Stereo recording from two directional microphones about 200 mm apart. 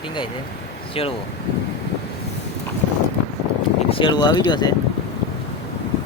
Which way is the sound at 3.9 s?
25° left (ahead or behind).